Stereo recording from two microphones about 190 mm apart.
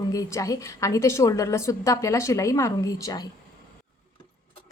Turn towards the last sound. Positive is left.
turn(degrees=20)  # may be behind; listen again after turning